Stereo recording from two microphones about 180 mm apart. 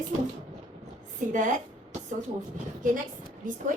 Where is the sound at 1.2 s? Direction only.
45° right (ahead or behind).